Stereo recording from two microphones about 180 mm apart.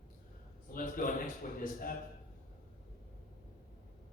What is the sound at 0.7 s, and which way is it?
A man's voice, 50° left (ahead or behind).